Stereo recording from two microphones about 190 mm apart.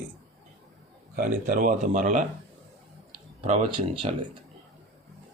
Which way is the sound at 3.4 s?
35° right (ahead or behind).